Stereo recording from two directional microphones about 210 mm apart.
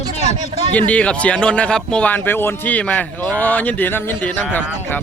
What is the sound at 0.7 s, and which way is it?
Speech, 5° left (ahead or behind).